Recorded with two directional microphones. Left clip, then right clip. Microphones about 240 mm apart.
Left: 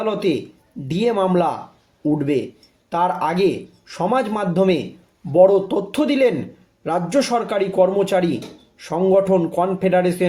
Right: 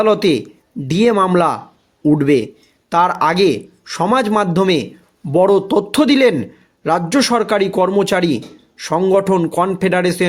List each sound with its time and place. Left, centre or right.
0.0 s a man's voice: right